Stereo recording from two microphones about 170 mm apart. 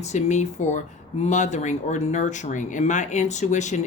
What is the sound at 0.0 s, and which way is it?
Speech, 40° left (ahead or behind).